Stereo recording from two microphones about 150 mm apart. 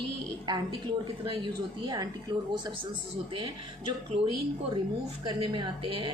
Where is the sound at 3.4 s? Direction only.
30° right (ahead or behind).